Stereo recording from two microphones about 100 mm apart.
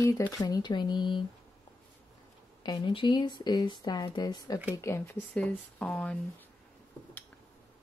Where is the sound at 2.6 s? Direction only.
50° left (ahead or behind).